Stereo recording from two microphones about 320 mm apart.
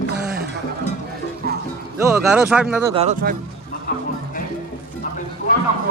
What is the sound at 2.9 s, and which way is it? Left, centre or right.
Speech, right.